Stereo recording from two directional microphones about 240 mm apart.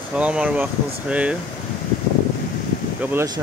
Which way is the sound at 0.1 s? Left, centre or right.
Centre.